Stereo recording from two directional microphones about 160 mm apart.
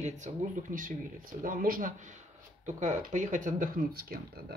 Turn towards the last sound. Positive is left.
turn(degrees=-60)  # may be behind; listen again after turning